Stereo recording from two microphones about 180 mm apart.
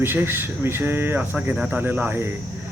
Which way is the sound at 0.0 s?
10° right (ahead or behind).